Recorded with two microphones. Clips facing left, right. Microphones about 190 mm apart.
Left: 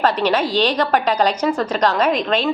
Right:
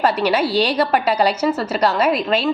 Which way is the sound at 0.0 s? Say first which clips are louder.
Even; 10° right (ahead or behind).